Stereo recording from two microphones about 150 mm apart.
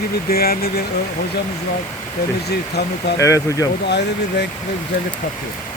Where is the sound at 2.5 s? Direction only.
90° left.